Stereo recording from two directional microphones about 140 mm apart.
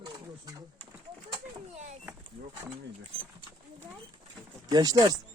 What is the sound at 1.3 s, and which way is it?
Speech, 50° right (ahead or behind).